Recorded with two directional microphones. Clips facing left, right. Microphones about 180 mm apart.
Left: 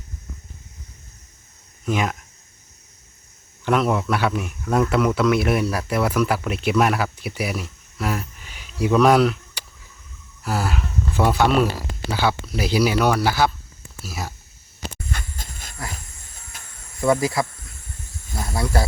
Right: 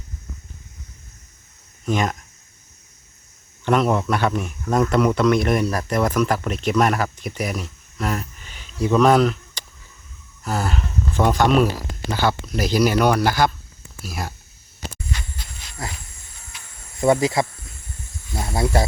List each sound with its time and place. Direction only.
1.8 s speech: 5° left (ahead or behind)
3.6 s speech: centre (ahead or behind)
15.1 s dog: 50° left (ahead or behind)
16.5 s cricket: 45° left (ahead or behind)
17.0 s speech: 25° right (ahead or behind)
18.5 s speech: 25° right (ahead or behind)